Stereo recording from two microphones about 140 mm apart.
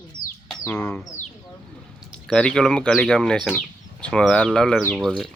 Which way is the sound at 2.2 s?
5° left (ahead or behind).